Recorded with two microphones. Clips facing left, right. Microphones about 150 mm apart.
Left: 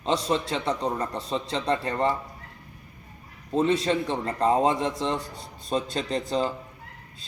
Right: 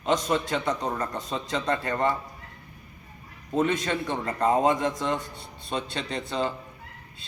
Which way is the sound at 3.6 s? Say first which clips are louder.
Left 3 dB; 30° left (ahead or behind).